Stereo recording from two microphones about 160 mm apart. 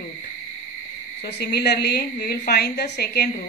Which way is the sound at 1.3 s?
90° left.